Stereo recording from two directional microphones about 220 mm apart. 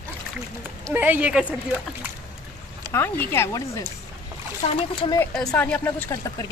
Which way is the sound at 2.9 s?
10° left (ahead or behind).